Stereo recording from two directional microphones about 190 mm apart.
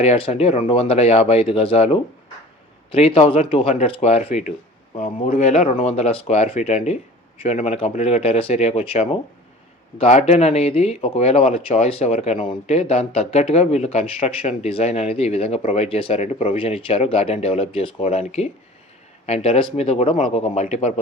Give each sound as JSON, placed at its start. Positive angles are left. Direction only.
{"t": 0.0, "sound": "speech", "side_deg": 30}